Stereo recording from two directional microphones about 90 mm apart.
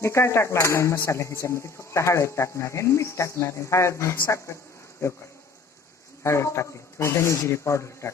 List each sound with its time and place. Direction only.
0.0 s speech: 30° left (ahead or behind)
6.2 s speech: 30° left (ahead or behind)